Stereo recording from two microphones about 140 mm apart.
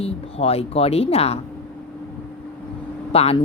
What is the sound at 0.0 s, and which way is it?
A woman's voice, 45° left (ahead or behind).